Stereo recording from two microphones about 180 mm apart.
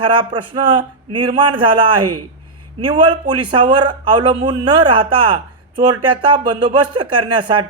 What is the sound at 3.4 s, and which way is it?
A man's voice, 25° right (ahead or behind).